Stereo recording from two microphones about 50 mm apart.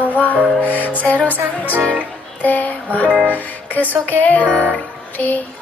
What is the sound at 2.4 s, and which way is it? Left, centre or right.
Speech, left.